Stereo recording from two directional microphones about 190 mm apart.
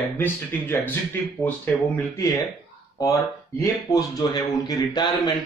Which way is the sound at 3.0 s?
20° left (ahead or behind).